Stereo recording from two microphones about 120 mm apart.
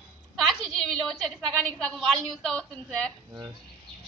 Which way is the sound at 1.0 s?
Centre (ahead or behind).